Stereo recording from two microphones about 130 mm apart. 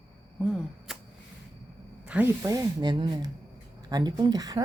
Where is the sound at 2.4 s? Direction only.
30° right (ahead or behind).